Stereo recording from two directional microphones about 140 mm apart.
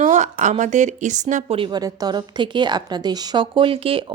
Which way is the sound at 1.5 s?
35° right (ahead or behind).